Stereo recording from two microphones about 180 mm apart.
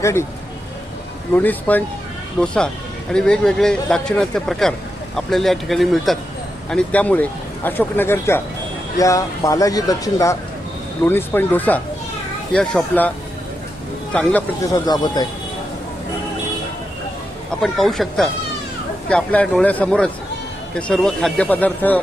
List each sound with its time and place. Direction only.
0.0 s speech: 15° left (ahead or behind)
1.3 s speech: 10° left (ahead or behind)
14.1 s speech: 10° left (ahead or behind)
14.7 s speech: 20° left (ahead or behind)
17.6 s speech: centre (ahead or behind)